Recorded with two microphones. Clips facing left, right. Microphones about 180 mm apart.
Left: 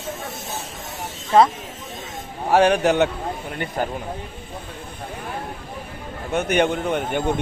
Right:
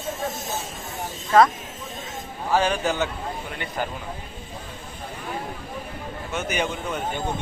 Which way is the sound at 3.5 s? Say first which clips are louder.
Left 5 dB; 45° left (ahead or behind).